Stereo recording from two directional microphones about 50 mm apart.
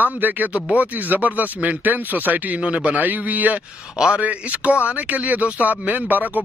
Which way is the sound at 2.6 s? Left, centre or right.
Right.